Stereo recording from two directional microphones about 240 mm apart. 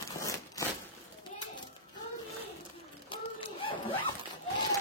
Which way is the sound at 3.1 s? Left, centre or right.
Left.